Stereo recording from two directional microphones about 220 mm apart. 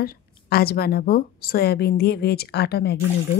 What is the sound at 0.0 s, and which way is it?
Speech, 45° left (ahead or behind).